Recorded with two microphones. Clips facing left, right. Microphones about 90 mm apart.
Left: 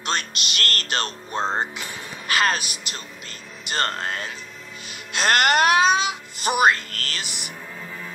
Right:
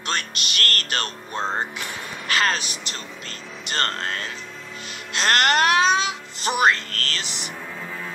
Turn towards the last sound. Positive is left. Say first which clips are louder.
# right 3 dB
turn(degrees=-70)  # may be behind; listen again after turning